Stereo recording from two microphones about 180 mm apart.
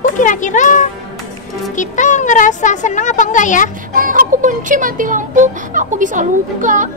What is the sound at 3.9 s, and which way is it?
Speech, 50° right (ahead or behind).